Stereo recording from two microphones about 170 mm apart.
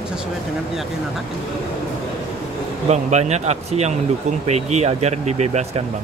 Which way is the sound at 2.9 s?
40° right (ahead or behind).